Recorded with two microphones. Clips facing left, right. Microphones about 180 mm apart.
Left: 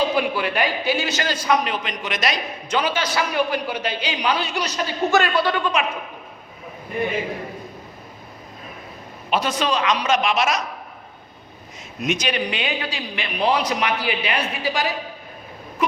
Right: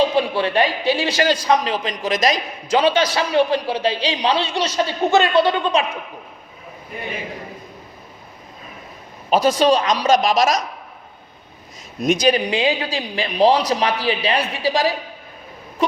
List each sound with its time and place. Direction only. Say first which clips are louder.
0.2 s a man's voice: right 4 dB; 30° right (ahead or behind)
9.3 s speech: right 7 dB; 40° right (ahead or behind)
11.9 s speech: right 7 dB; 35° right (ahead or behind)